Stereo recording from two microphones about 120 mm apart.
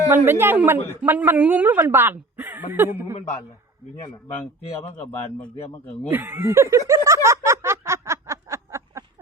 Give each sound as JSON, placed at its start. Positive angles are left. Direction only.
{"t": 0.1, "sound": "a woman's voice", "side_deg": -15}
{"t": 5.4, "sound": "a man's voice", "side_deg": 15}
{"t": 6.1, "sound": "snicker", "side_deg": -15}